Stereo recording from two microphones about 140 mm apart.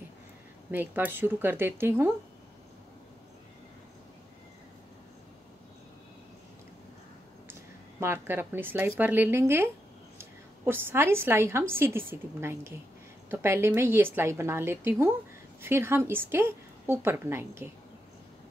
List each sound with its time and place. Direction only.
0.7 s a woman's voice: 15° right (ahead or behind)
8.0 s a woman's voice: 15° right (ahead or behind)